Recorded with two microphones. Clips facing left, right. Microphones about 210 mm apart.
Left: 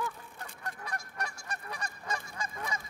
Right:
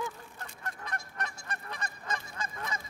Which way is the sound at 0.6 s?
10° left (ahead or behind).